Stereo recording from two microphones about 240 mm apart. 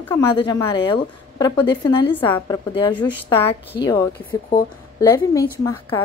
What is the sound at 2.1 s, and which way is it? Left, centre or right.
A woman's voice, centre.